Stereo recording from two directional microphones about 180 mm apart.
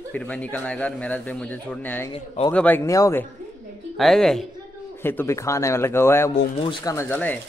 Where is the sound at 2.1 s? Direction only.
30° left (ahead or behind).